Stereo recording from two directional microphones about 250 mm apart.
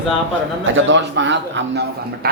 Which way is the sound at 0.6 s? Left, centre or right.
Right.